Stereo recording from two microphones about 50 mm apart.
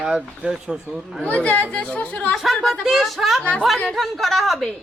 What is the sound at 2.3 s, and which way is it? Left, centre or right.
A man's voice, centre.